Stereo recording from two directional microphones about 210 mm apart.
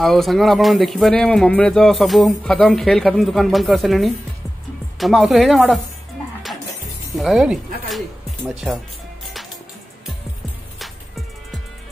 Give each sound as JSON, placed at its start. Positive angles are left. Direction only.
{"t": 0.0, "sound": "speech", "side_deg": 0}
{"t": 7.2, "sound": "speech", "side_deg": 0}